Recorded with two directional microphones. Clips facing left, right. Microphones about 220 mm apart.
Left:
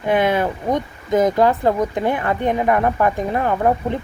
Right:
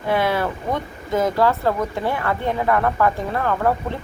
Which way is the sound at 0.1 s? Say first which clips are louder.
Left 3 dB; 20° left (ahead or behind).